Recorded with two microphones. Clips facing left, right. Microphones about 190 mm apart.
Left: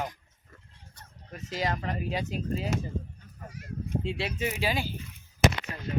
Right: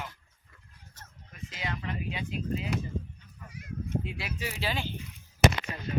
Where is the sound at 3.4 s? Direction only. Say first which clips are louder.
Left 3 dB; 45° left (ahead or behind).